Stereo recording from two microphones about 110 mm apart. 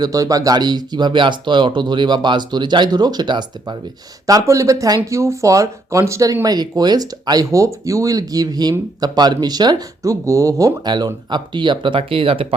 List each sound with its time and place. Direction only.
0.0 s speech: 35° right (ahead or behind)
4.3 s speech: 30° right (ahead or behind); by 12.5 s 55° right (ahead or behind)